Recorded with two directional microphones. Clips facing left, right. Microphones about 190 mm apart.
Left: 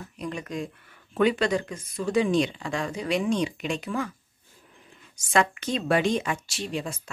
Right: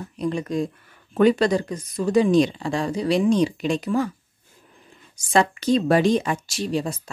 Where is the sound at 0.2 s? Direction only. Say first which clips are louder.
Right 8 dB; 35° right (ahead or behind).